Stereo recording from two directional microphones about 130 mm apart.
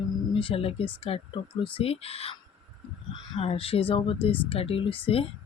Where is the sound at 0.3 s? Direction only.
45° left (ahead or behind).